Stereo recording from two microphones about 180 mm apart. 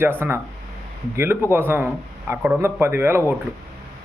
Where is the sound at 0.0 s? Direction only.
10° right (ahead or behind).